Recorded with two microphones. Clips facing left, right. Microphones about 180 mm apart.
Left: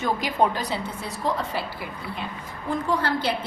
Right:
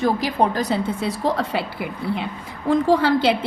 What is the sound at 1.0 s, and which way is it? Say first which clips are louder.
Speech: right 5 dB; 85° right.